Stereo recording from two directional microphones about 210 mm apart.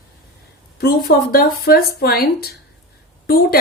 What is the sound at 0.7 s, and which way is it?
A woman's voice, 45° left (ahead or behind).